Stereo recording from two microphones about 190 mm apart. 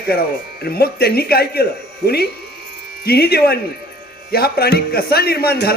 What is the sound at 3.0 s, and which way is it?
A man's voice, 55° left (ahead or behind).